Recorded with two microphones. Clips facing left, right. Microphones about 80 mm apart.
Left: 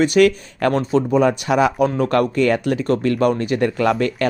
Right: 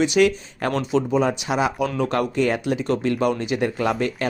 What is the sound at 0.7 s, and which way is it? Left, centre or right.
Speech, left.